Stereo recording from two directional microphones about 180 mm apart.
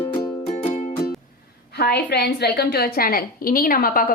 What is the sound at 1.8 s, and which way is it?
A woman's voice, 65° left (ahead or behind).